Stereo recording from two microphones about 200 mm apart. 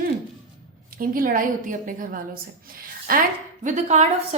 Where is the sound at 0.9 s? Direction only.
45° right (ahead or behind).